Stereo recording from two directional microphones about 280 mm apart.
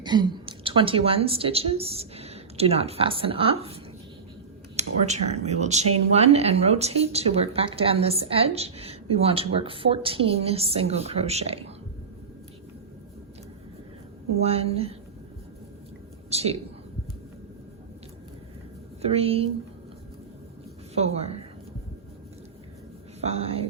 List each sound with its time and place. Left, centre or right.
0.0 s a woman's voice: centre
4.8 s speech: right
14.4 s speech: right
16.3 s speech: right
19.0 s speech: right
20.9 s speech: right
23.2 s speech: right